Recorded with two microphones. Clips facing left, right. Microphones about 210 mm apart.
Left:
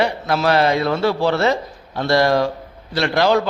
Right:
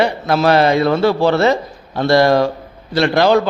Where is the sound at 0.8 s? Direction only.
60° right (ahead or behind).